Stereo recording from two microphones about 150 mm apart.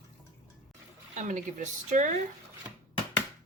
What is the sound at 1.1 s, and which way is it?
Speech, 55° right (ahead or behind).